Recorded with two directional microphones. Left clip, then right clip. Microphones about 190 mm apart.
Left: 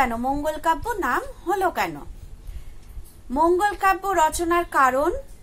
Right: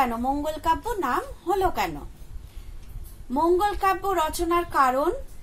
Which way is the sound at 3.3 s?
20° left (ahead or behind).